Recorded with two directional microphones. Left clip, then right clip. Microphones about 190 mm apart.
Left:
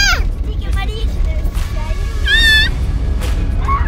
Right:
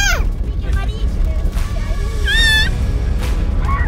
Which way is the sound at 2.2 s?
20° right (ahead or behind).